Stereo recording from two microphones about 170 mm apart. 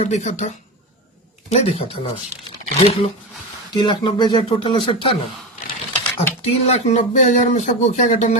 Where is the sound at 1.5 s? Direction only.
35° left (ahead or behind).